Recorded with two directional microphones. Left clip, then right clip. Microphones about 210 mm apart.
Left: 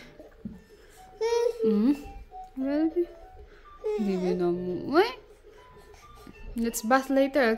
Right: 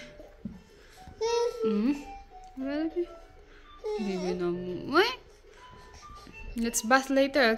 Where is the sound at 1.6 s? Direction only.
25° left (ahead or behind).